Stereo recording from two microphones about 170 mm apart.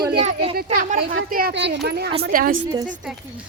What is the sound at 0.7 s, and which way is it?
Speech, 55° right (ahead or behind).